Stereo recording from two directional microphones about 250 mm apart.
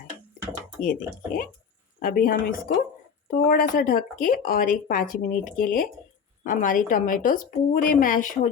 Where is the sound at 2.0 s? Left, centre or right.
Left.